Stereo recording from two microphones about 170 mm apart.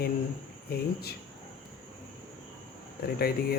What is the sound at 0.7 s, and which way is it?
Speech, 65° left (ahead or behind).